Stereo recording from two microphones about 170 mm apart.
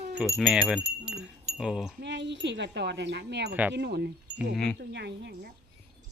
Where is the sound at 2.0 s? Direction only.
90° right.